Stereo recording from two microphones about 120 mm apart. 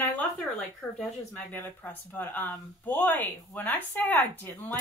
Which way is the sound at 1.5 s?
15° left (ahead or behind).